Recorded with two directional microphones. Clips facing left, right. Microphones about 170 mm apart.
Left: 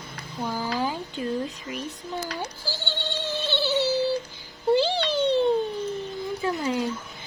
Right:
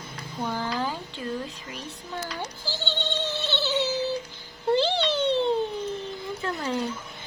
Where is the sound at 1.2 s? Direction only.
20° left (ahead or behind).